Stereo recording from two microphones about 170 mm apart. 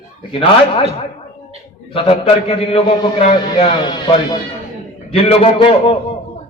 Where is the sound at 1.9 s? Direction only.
35° left (ahead or behind).